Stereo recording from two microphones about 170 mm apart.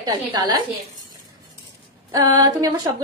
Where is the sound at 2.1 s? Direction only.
20° right (ahead or behind).